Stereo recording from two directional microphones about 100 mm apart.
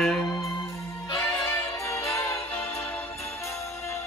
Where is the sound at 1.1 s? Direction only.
30° left (ahead or behind).